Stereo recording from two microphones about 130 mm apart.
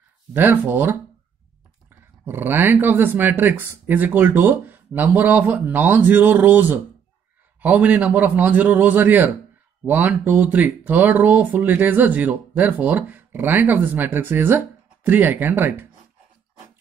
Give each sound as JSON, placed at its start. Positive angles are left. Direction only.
{"t": 0.3, "sound": "speech", "side_deg": -15}
{"t": 2.2, "sound": "speech", "side_deg": -15}